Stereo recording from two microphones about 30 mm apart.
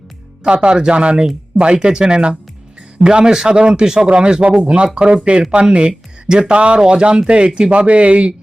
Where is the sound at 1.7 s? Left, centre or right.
Right.